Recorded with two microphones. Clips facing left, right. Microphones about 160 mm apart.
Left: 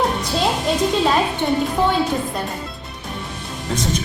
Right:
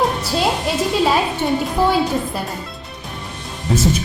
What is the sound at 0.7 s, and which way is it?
A man's voice, 5° right (ahead or behind).